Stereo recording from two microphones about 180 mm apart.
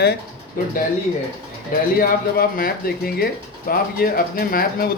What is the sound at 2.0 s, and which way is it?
Speech, 55° left (ahead or behind).